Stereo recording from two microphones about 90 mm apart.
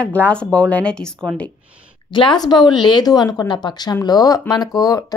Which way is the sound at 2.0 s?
65° left (ahead or behind).